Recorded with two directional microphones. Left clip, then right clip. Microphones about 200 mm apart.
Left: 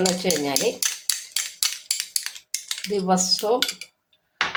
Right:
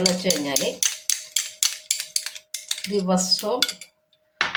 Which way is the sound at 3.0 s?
25° left (ahead or behind).